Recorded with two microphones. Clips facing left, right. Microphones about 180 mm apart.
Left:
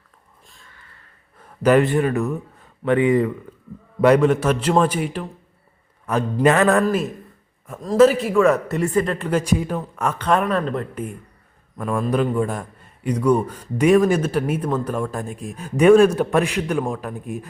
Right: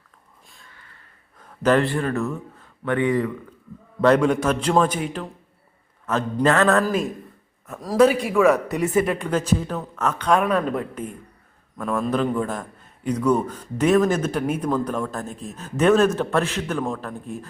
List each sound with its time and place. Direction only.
1.4 s speech: 10° left (ahead or behind)
4.0 s a man's voice: 5° left (ahead or behind)
6.8 s a man's voice: 5° left (ahead or behind)
10.9 s a man's voice: 10° left (ahead or behind)